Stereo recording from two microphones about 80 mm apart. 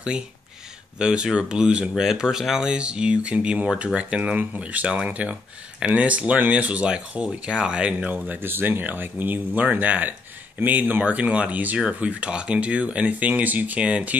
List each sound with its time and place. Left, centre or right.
0.9 s speech: centre